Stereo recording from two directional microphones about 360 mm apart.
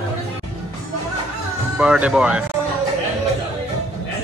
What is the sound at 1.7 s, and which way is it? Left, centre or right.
Speech, centre.